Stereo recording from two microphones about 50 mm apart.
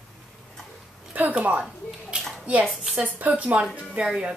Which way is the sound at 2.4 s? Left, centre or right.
Right.